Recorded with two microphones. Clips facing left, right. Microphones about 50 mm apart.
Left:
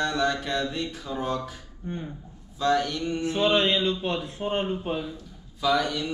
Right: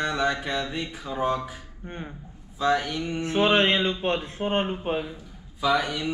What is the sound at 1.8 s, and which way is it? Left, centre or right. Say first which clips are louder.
Speech: left 3 dB; right.